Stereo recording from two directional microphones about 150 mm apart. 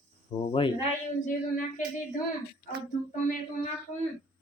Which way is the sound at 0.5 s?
35° left (ahead or behind).